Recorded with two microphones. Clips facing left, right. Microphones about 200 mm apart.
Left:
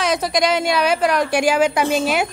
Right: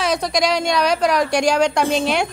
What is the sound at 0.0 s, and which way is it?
A woman's voice, centre (ahead or behind).